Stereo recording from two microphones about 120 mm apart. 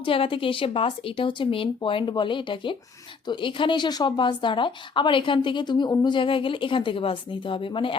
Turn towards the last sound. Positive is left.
turn(degrees=45)  # may be behind; listen again after turning